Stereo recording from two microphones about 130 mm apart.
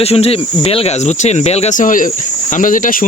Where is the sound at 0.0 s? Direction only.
50° left (ahead or behind).